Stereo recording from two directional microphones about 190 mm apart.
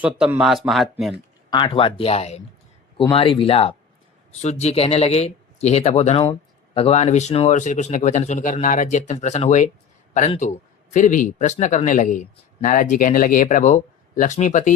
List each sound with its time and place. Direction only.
0.0 s speech: 5° right (ahead or behind)
1.5 s speech: 25° left (ahead or behind); by 14.7 s 40° left (ahead or behind)